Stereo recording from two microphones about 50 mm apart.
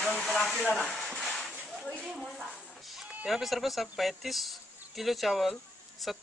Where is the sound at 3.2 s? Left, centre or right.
Centre.